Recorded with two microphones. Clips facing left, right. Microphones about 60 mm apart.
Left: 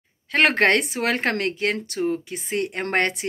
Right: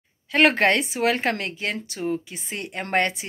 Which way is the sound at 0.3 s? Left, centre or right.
Left.